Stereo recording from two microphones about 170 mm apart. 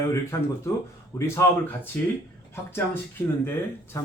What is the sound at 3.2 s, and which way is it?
Speech, 15° left (ahead or behind).